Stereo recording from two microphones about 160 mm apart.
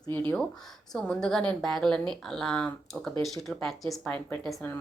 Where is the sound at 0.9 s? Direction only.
5° left (ahead or behind).